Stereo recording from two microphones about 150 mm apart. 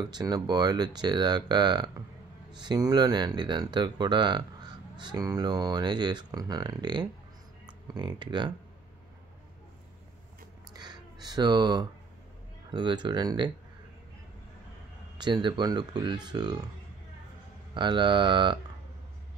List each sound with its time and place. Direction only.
0.0 s speech: 25° right (ahead or behind)
10.7 s a sound: 30° right (ahead or behind)
12.7 s speech: 30° right (ahead or behind)
15.1 s speech: 30° right (ahead or behind)
17.7 s speech: 30° right (ahead or behind)